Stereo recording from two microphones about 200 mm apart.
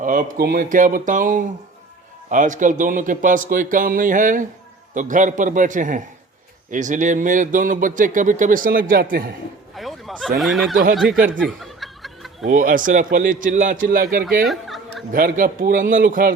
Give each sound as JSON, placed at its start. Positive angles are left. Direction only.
{"t": 0.0, "sound": "speech", "side_deg": -40}
{"t": 9.7, "sound": "speech", "side_deg": 0}
{"t": 11.4, "sound": "snicker", "side_deg": 0}
{"t": 12.5, "sound": "a man's voice", "side_deg": -40}
{"t": 14.4, "sound": "a sound", "side_deg": 0}
{"t": 15.1, "sound": "a man's voice", "side_deg": -45}